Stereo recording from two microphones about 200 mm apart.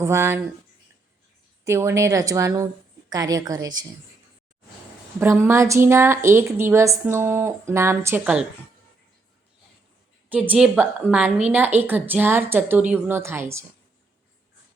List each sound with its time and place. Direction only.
0.0 s a woman's voice: 15° right (ahead or behind)
1.6 s a woman's voice: 15° right (ahead or behind)
5.2 s a woman's voice: 10° right (ahead or behind)
10.2 s a woman's voice: 10° right (ahead or behind)